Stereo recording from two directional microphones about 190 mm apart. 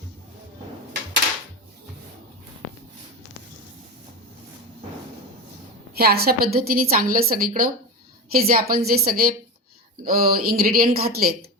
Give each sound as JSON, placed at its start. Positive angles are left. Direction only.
{"t": 6.0, "sound": "speech", "side_deg": -55}